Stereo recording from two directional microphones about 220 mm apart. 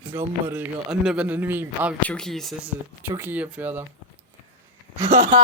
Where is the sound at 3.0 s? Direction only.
10° right (ahead or behind).